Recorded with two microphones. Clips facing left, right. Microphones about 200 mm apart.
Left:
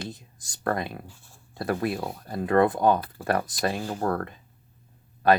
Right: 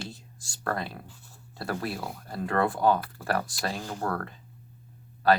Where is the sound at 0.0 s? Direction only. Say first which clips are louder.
Left 3 dB; 20° left (ahead or behind).